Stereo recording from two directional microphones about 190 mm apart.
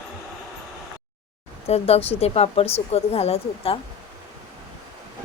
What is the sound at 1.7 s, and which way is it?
Speech, 30° left (ahead or behind).